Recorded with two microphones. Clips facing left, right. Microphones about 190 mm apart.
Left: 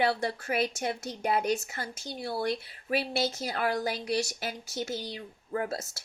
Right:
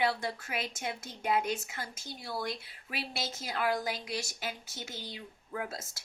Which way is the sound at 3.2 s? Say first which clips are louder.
Left 3 dB; 35° left (ahead or behind).